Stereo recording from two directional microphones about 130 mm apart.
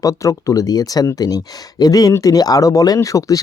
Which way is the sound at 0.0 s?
25° left (ahead or behind).